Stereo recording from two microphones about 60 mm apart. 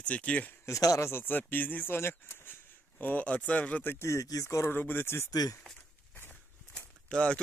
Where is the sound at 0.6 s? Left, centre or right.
Left.